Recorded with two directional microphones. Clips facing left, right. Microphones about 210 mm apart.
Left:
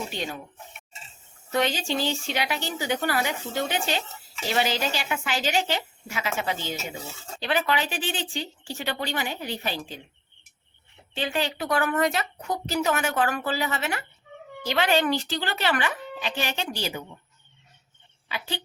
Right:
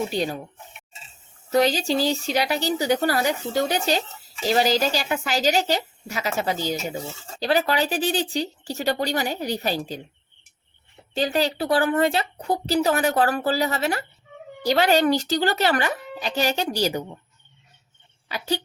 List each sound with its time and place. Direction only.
0.1 s a woman's voice: 35° right (ahead or behind)
1.5 s a woman's voice: 35° right (ahead or behind)
11.1 s a woman's voice: 40° right (ahead or behind)
18.3 s a woman's voice: 40° right (ahead or behind)